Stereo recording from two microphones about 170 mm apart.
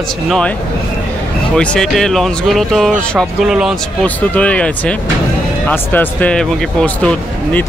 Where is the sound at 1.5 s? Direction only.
5° left (ahead or behind).